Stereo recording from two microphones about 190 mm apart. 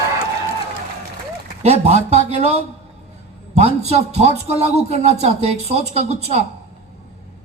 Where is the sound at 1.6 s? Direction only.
35° right (ahead or behind).